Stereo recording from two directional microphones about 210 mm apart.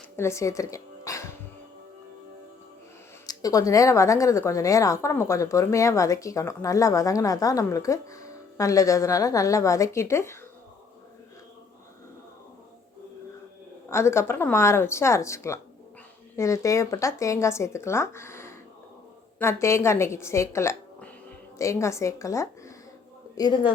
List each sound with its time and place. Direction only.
0.2 s a woman's voice: 15° left (ahead or behind)
3.2 s a woman's voice: 15° left (ahead or behind)
13.9 s a woman's voice: 10° left (ahead or behind)